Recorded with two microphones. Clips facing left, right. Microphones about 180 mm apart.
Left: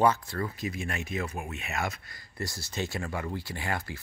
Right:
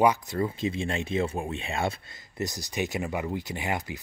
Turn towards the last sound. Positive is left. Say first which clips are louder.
# right 3 dB
turn(degrees=-20)  # may be behind; listen again after turning